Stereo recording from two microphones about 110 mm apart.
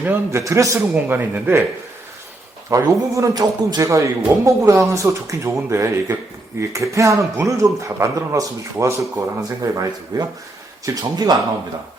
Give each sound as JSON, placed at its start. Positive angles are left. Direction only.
{"t": 0.0, "sound": "a man's voice", "side_deg": -20}
{"t": 2.6, "sound": "a man's voice", "side_deg": -30}